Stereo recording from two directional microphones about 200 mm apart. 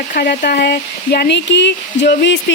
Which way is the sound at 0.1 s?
50° left (ahead or behind).